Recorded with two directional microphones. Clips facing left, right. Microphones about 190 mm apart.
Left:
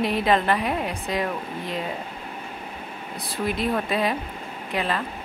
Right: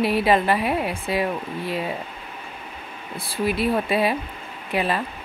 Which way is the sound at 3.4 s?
5° right (ahead or behind).